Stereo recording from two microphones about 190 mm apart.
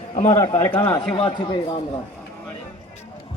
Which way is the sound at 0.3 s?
20° left (ahead or behind).